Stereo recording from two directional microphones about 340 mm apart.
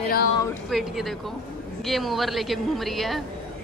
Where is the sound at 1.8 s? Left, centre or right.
Centre.